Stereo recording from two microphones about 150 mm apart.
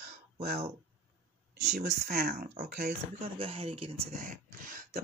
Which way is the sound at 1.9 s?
90° right.